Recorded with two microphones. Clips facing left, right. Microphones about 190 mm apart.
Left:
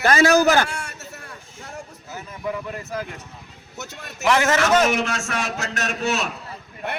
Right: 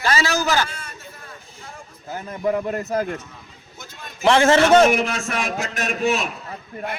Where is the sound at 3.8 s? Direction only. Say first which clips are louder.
Left 4 dB; 70° left (ahead or behind).